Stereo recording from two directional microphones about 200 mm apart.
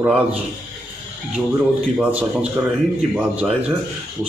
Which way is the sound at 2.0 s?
5° right (ahead or behind).